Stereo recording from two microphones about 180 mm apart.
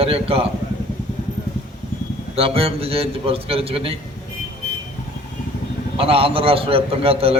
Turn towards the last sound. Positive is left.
turn(degrees=-30)  # may be behind; listen again after turning